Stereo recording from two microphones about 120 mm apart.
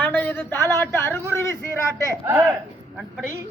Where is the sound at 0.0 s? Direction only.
15° left (ahead or behind).